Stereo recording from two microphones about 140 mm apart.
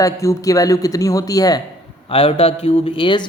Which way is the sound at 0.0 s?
25° left (ahead or behind).